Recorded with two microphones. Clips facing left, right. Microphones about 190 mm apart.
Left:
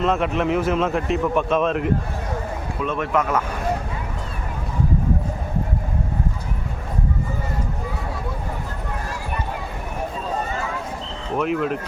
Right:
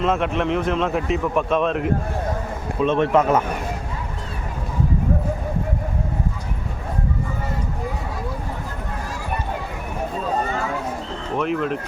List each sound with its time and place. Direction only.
0.0 s a man's voice: centre (ahead or behind)
2.8 s speech: 30° right (ahead or behind)
11.3 s a man's voice: centre (ahead or behind)